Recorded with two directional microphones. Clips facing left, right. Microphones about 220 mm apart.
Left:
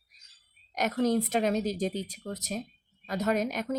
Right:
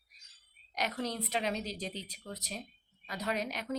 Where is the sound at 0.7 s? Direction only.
45° left (ahead or behind).